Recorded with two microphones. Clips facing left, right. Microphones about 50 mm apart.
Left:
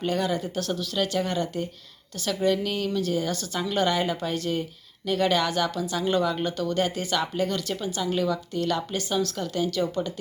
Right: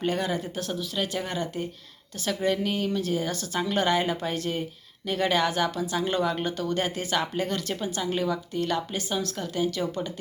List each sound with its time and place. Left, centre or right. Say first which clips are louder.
0.0 s a woman's voice: left 1 dB; right